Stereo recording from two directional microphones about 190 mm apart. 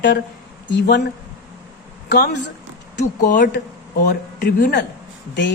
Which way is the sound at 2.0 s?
60° left (ahead or behind).